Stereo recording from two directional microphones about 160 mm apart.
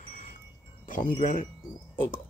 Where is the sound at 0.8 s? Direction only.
55° left (ahead or behind).